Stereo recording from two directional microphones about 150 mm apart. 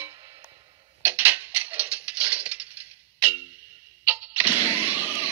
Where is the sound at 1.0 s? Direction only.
15° right (ahead or behind).